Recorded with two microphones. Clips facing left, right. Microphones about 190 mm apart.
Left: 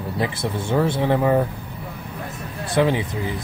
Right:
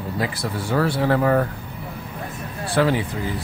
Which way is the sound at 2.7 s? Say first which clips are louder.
Even; 20° left (ahead or behind).